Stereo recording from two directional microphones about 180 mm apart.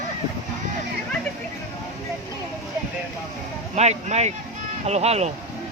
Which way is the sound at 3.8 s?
40° right (ahead or behind).